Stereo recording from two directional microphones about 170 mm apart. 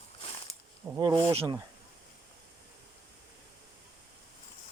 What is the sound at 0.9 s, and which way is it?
Speech, 20° right (ahead or behind).